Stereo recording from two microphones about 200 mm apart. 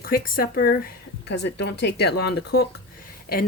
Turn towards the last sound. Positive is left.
turn(degrees=45)  # may be behind; listen again after turning